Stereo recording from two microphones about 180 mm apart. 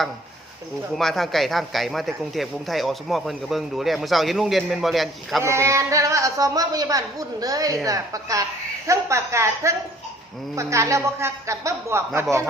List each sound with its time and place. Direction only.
0.9 s speech: centre (ahead or behind)
5.4 s a woman's voice: 15° right (ahead or behind)